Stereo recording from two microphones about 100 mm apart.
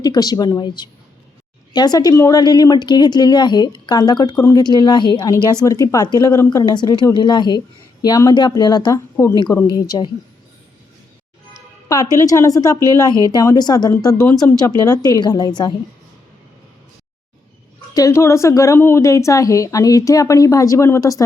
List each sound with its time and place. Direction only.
0.0 s a woman's voice: 40° left (ahead or behind)
2.1 s a woman's voice: 30° left (ahead or behind)
2.4 s speech: 45° left (ahead or behind)
5.6 s a woman's voice: 35° left (ahead or behind)
6.7 s a woman's voice: 45° left (ahead or behind)
11.5 s a woman's voice: 35° left (ahead or behind)
17.9 s a woman's voice: 35° left (ahead or behind)